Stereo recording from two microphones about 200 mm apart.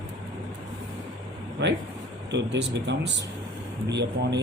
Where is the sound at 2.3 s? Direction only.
60° right (ahead or behind).